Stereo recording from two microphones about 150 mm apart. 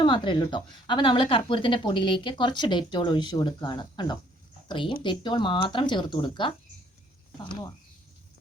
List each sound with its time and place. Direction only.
0.0 s a woman's voice: 30° left (ahead or behind)